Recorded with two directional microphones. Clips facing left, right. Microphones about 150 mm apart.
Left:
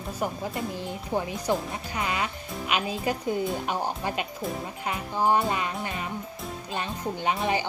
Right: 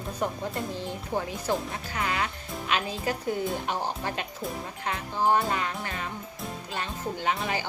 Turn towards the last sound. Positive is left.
turn(degrees=20)  # may be behind; listen again after turning